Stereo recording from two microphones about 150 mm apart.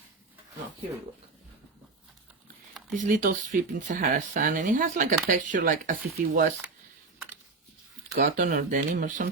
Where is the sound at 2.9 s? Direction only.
60° right (ahead or behind).